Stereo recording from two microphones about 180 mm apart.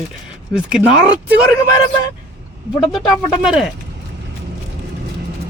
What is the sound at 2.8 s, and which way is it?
Speech, centre (ahead or behind).